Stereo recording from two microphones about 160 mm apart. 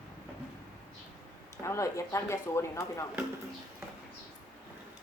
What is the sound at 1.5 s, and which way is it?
Speech, 20° left (ahead or behind).